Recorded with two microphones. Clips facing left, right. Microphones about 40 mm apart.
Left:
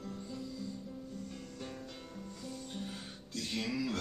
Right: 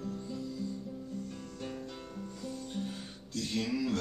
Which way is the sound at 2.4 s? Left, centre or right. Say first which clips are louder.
Right 5 dB; centre.